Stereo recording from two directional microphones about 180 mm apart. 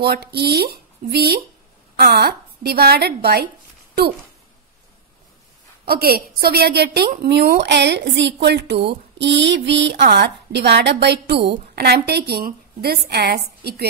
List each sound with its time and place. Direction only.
0.0 s a woman's voice: 60° right (ahead or behind)
5.9 s a woman's voice: 55° right (ahead or behind); by 10.0 s 80° right
10.0 s a woman's voice: 65° right (ahead or behind)